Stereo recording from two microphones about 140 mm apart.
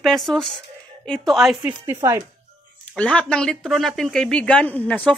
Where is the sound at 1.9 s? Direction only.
25° right (ahead or behind).